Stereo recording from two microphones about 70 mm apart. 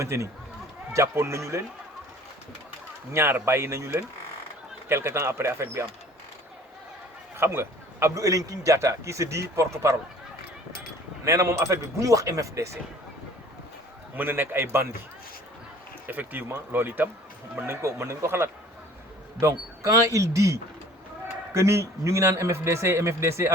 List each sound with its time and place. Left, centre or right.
0.0 s a man's voice: right
3.1 s speech: right
7.3 s a man's voice: right
11.3 s a man's voice: right
14.2 s speech: right
16.0 s speech: right
17.7 s a man's voice: right